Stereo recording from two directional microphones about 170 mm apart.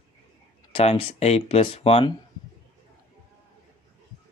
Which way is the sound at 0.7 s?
35° left (ahead or behind).